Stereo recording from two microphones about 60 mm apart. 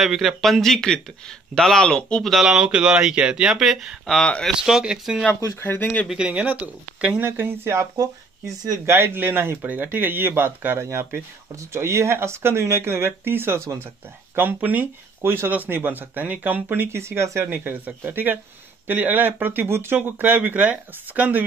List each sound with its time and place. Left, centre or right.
0.0 s speech: centre
2.3 s speech: centre
3.4 s speech: centre
4.2 s speech: centre
4.5 s speech: centre
5.6 s speech: left
6.0 s speech: centre
7.2 s speech: right
7.9 s speech: right
8.8 s speech: right
10.8 s speech: right
15.2 s speech: right
15.5 s speech: right
17.5 s speech: right